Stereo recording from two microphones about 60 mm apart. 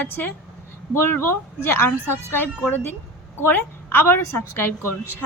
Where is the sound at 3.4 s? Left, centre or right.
Left.